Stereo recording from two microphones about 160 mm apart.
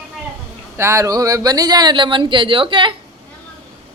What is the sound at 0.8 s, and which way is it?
Speech, 20° right (ahead or behind).